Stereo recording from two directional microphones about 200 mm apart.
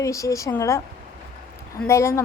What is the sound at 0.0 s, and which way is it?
Speech, 15° left (ahead or behind).